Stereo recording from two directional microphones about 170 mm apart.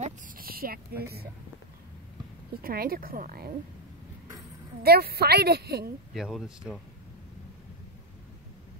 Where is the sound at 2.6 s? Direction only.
60° right (ahead or behind).